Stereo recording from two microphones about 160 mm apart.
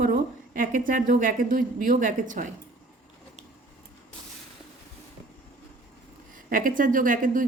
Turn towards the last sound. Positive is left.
turn(degrees=-55)  # may be behind; listen again after turning